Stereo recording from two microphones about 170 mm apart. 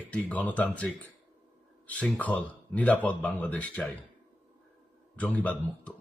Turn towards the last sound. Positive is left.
turn(degrees=10)  # may be behind; listen again after turning